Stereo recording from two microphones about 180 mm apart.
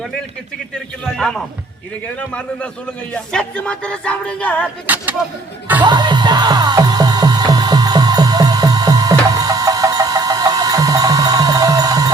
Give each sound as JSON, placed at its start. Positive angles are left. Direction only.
{"t": 1.0, "sound": "a man's voice", "side_deg": 5}
{"t": 3.1, "sound": "music", "side_deg": 5}
{"t": 4.6, "sound": "a sound", "side_deg": -10}
{"t": 5.8, "sound": "music", "side_deg": -25}